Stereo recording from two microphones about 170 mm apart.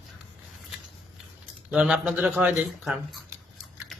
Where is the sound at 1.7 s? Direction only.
5° right (ahead or behind).